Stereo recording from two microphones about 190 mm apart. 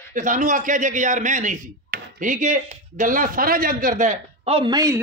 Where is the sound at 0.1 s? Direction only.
45° right (ahead or behind).